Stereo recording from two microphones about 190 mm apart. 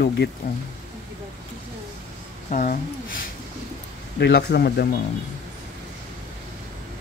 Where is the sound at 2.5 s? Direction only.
45° left (ahead or behind).